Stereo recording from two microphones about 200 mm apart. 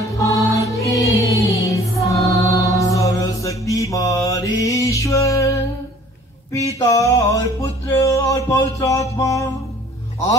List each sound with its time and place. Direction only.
0.2 s music: 15° left (ahead or behind)
2.2 s mantra: 15° left (ahead or behind)
6.5 s a sound: 15° left (ahead or behind)
8.0 s music: 15° left (ahead or behind)